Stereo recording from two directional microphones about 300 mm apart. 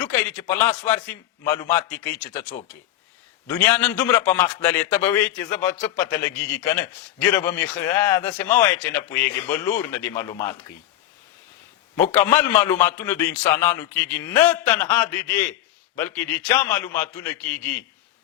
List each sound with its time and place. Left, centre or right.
0.0 s a man's voice: centre
3.4 s a man's voice: centre
12.1 s a man's voice: centre